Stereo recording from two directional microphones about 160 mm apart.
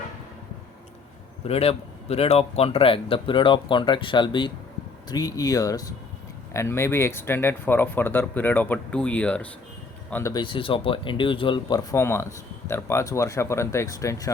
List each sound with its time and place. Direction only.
1.5 s a man's voice: 40° left (ahead or behind); by 10.3 s 15° left (ahead or behind)
10.3 s a man's voice: 30° left (ahead or behind)